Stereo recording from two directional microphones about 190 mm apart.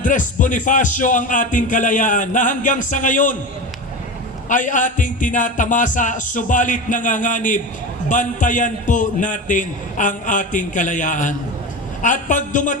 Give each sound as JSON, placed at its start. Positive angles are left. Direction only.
{"t": 0.0, "sound": "a man's voice", "side_deg": 40}
{"t": 4.4, "sound": "a man's voice", "side_deg": 40}